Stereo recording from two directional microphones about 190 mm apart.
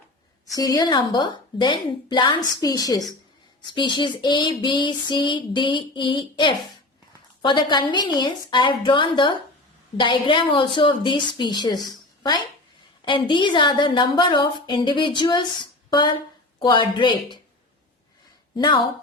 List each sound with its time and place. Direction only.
0.5 s female singing: 20° left (ahead or behind)
13.1 s female singing: 25° left (ahead or behind)
15.9 s speech: 25° left (ahead or behind)
16.6 s female singing: 20° left (ahead or behind)
18.5 s female singing: 25° left (ahead or behind)